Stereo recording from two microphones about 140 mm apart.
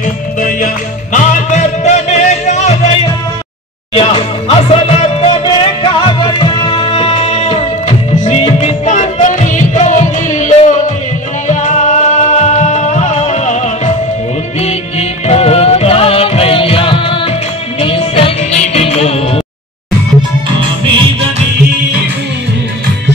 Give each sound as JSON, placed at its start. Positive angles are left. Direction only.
{"t": 0.4, "sound": "music", "side_deg": 75}
{"t": 1.1, "sound": "music", "side_deg": 60}
{"t": 3.9, "sound": "music", "side_deg": 40}